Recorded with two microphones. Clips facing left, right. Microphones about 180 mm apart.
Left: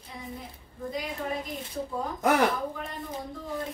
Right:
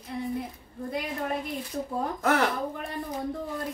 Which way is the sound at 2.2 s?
15° left (ahead or behind).